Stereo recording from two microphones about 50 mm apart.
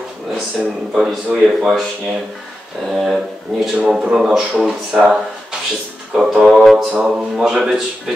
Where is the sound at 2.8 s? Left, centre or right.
Centre.